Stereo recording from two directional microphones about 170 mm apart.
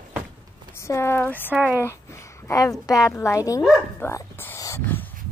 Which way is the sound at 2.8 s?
20° left (ahead or behind).